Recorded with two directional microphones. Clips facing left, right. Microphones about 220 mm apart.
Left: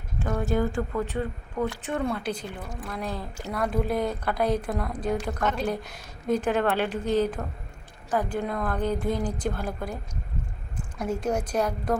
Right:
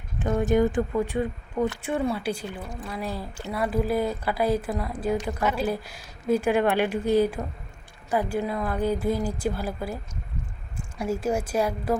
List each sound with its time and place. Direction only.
0.2 s speech: 20° right (ahead or behind)